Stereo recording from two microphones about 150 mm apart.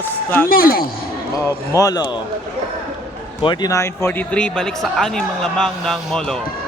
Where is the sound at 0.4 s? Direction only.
80° left.